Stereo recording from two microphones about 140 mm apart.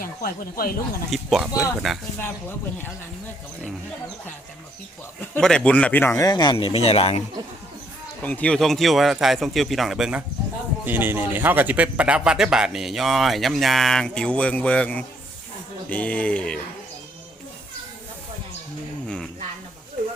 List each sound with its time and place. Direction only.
0.0 s speech: 90° left
1.1 s speech: centre (ahead or behind)
5.2 s speech: 10° left (ahead or behind)
6.2 s speech: 30° left (ahead or behind)
8.2 s speech: 10° left (ahead or behind)
19.0 s a sound: 5° left (ahead or behind)